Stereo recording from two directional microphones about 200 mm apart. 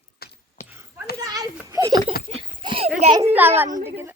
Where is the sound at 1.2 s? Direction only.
20° right (ahead or behind).